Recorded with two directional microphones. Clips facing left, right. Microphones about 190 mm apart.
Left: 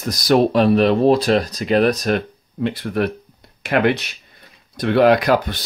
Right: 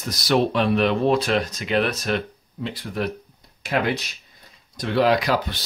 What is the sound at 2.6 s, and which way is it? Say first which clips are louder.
Speech: left 7 dB; 60° left (ahead or behind).